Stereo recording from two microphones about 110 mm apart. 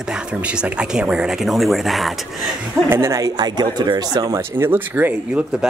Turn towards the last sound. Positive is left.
turn(degrees=-20)  # may be behind; listen again after turning